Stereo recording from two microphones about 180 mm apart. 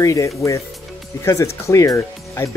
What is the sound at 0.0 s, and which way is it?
Speech, 15° left (ahead or behind).